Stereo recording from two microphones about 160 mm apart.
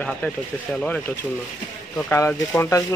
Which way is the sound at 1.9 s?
15° left (ahead or behind).